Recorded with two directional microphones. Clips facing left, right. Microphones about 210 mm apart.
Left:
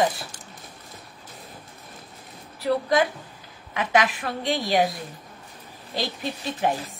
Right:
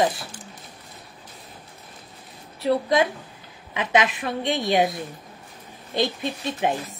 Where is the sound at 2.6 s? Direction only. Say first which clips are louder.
Right 1 dB; 25° right (ahead or behind).